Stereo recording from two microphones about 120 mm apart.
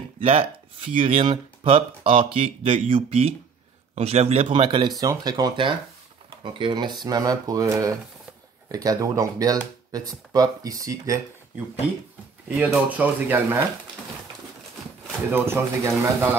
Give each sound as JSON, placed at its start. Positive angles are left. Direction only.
{"t": 0.2, "sound": "speech", "side_deg": -55}
{"t": 12.4, "sound": "speech", "side_deg": -10}
{"t": 15.3, "sound": "speech", "side_deg": -20}